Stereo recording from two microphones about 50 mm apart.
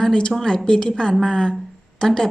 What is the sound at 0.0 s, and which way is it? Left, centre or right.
A woman's voice, centre.